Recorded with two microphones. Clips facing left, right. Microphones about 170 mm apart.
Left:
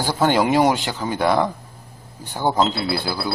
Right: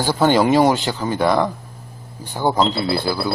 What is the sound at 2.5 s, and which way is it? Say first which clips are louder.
Speech: right 1 dB; 5° left (ahead or behind).